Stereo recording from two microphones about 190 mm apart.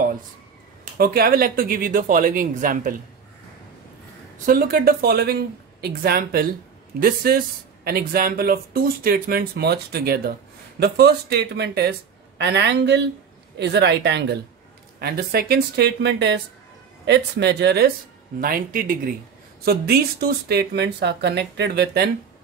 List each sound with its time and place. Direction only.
0.9 s speech: 50° right (ahead or behind)
4.5 s speech: 50° right (ahead or behind)
18.4 s speech: 50° right (ahead or behind)